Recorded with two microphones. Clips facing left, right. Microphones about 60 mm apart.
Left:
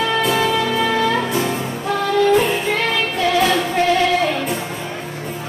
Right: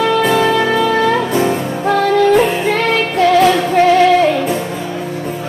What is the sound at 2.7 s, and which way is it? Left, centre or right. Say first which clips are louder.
Music: right 5 dB; right.